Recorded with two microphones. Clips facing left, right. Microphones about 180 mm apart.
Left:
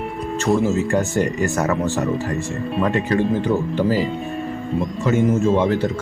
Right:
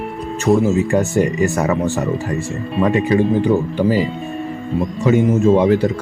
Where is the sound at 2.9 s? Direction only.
15° right (ahead or behind).